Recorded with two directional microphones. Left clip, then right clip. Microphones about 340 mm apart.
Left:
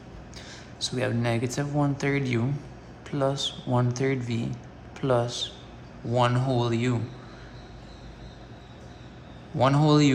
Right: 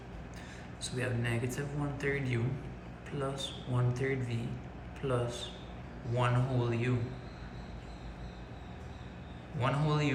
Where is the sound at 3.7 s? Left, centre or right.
Centre.